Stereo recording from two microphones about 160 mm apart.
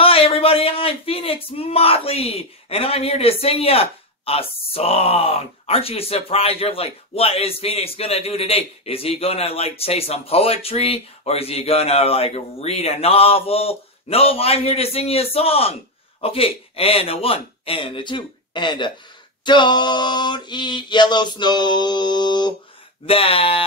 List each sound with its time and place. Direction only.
0.0 s speech: 35° left (ahead or behind)
19.4 s a sound: 30° left (ahead or behind)
23.0 s speech: 35° left (ahead or behind)